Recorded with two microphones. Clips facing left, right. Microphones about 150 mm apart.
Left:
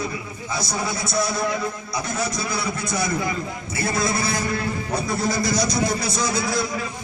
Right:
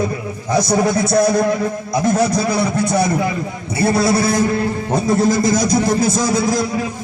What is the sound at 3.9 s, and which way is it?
Speech, 80° right.